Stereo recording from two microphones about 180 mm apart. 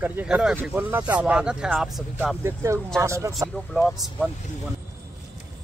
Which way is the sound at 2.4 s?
15° right (ahead or behind).